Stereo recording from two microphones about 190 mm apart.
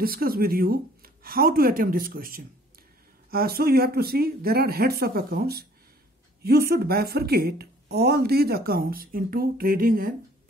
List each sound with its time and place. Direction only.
0.0 s speech: 50° right (ahead or behind)